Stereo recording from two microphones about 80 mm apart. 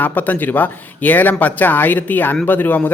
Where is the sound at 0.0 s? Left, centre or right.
Left.